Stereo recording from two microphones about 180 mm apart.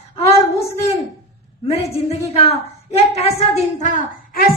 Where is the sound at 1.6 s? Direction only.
35° left (ahead or behind).